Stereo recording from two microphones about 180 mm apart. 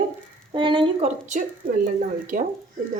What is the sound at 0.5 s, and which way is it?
Speech, 25° right (ahead or behind).